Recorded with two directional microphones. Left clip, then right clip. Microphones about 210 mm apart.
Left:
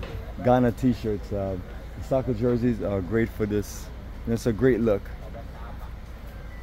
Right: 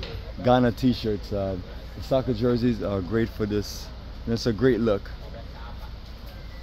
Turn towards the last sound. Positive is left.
turn(degrees=0)  # may be behind; listen again after turning